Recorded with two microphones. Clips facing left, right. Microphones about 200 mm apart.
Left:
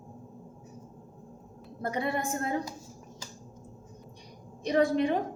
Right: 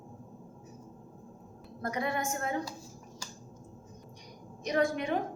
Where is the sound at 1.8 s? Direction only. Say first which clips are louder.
Left 2 dB; 30° left (ahead or behind).